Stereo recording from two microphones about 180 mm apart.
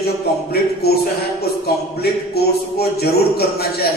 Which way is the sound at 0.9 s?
60° left (ahead or behind).